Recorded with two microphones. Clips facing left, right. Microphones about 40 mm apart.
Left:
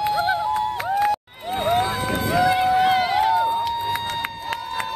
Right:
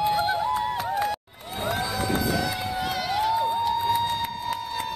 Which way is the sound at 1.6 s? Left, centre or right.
Left.